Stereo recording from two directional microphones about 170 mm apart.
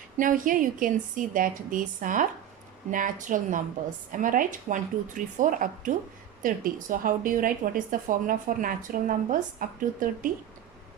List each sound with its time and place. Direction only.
0.2 s speech: 50° right (ahead or behind)